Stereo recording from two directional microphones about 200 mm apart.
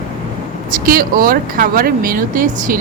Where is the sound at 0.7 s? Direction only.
45° right (ahead or behind).